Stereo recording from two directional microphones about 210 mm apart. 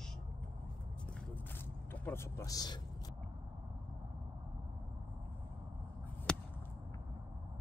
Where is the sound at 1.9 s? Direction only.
10° left (ahead or behind).